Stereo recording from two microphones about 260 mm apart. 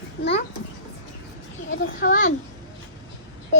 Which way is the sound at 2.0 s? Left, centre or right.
Left.